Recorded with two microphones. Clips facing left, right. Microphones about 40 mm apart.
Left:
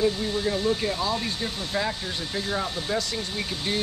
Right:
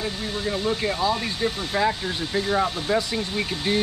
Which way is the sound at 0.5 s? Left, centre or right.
Centre.